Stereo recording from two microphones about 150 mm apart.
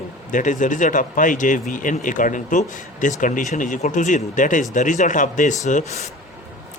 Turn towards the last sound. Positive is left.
turn(degrees=60)  # may be behind; listen again after turning